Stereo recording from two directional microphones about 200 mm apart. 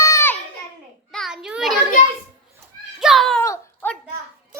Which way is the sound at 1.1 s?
Centre (ahead or behind).